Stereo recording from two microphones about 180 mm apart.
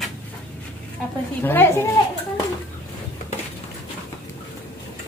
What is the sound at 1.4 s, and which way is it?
Speech, 10° left (ahead or behind).